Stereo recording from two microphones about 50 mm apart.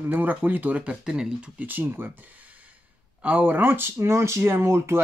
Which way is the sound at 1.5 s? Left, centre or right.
Right.